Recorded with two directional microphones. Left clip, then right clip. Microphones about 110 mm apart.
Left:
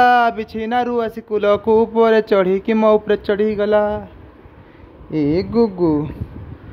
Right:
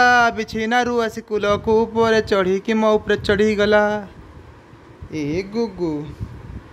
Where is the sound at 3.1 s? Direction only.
Centre (ahead or behind).